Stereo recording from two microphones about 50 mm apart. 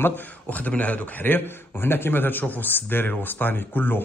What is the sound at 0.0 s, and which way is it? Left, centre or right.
A man's voice, left.